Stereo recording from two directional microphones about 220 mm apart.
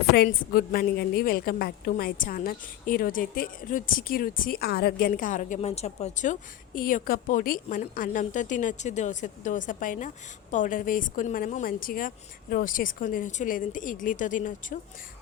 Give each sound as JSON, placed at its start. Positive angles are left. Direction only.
{"t": 0.1, "sound": "a woman's voice", "side_deg": 45}